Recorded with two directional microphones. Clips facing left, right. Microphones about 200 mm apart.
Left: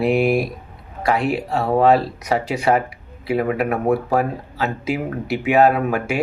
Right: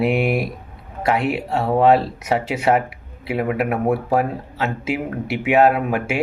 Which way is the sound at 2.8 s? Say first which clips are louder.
Left 3 dB; 25° right (ahead or behind).